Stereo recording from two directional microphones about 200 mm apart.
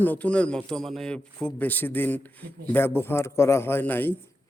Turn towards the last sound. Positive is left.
turn(degrees=10)  # may be behind; listen again after turning